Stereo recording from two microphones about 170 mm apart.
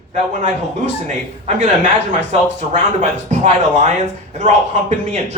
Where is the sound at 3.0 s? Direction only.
45° right (ahead or behind).